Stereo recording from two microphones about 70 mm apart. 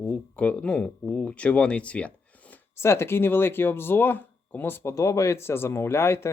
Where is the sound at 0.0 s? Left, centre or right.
Left.